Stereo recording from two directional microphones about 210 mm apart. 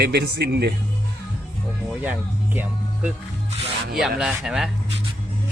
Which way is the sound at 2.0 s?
10° right (ahead or behind).